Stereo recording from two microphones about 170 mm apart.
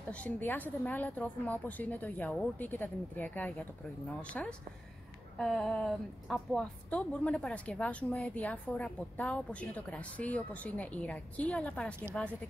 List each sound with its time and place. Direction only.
0.1 s a woman's voice: 10° left (ahead or behind)